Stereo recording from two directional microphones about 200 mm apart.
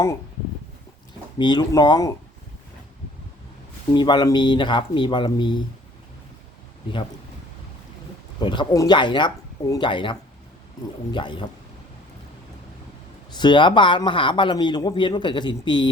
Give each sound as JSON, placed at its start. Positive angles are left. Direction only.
{"t": 1.4, "sound": "a man's voice", "side_deg": 20}
{"t": 3.9, "sound": "a man's voice", "side_deg": 20}
{"t": 8.4, "sound": "a man's voice", "side_deg": 20}
{"t": 13.3, "sound": "a man's voice", "side_deg": 25}